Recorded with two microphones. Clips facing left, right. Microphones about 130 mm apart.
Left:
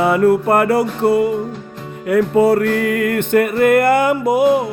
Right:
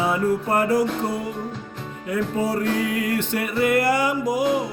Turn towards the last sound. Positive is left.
turn(degrees=60)  # may be behind; listen again after turning